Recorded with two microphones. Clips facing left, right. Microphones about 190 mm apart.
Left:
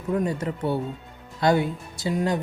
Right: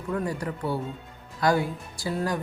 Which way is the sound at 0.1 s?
20° left (ahead or behind).